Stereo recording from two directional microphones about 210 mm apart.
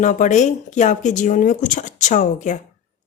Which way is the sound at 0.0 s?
35° left (ahead or behind).